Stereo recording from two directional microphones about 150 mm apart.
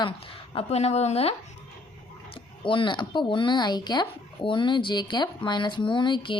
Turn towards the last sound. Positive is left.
turn(degrees=30)  # may be behind; listen again after turning